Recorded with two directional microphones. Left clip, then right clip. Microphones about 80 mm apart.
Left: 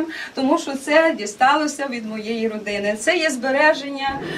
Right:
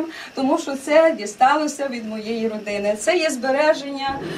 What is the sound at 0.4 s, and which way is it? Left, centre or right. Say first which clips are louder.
A woman's voice: left 1 dB; centre.